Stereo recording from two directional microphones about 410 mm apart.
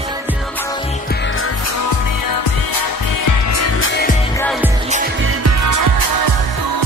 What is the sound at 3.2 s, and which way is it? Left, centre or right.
Music, left.